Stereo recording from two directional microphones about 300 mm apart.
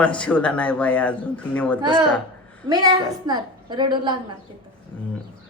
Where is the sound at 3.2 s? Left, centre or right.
Centre.